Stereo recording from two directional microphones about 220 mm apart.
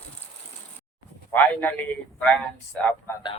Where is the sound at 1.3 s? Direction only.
10° left (ahead or behind).